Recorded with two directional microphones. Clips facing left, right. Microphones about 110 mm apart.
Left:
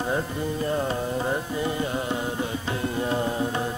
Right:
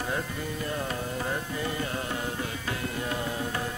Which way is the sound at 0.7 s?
25° left (ahead or behind).